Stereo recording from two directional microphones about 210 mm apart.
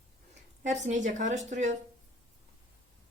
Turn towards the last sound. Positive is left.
turn(degrees=-35)  # may be behind; listen again after turning